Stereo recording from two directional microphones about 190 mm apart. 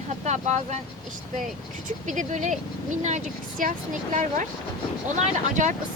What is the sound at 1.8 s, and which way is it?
Speech, 40° right (ahead or behind).